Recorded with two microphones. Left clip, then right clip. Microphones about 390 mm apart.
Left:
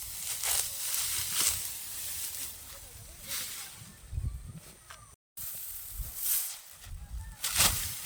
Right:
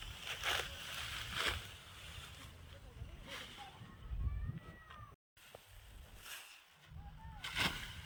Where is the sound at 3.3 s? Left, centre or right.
Centre.